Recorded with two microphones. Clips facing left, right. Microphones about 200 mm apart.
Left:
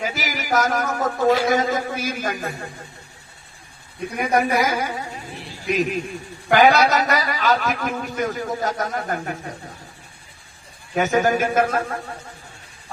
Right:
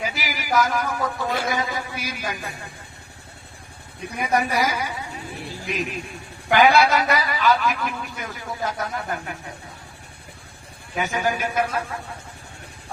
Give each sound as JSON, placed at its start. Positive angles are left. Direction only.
{"t": 0.0, "sound": "a man's voice", "side_deg": 45}
{"t": 4.2, "sound": "a man's voice", "side_deg": 50}
{"t": 10.9, "sound": "a man's voice", "side_deg": 45}